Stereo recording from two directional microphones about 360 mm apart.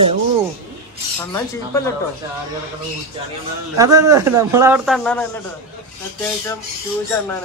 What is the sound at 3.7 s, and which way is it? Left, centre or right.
Speech, centre.